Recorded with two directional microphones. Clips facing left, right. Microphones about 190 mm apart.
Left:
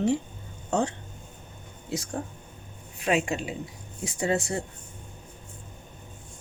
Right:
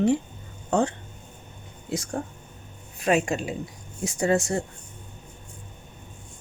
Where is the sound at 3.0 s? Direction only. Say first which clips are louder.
Right 3 dB; 45° right (ahead or behind).